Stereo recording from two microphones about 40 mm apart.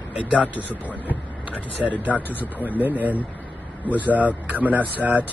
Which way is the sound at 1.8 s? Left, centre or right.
Right.